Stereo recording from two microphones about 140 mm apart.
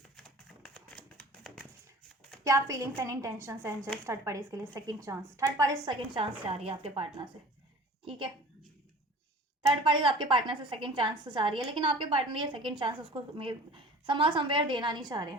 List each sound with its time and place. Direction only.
0.2 s typewriter: 5° left (ahead or behind)
2.4 s speech: 25° right (ahead or behind)
6.1 s a woman's voice: 40° right (ahead or behind)
9.6 s a woman's voice: 35° right (ahead or behind)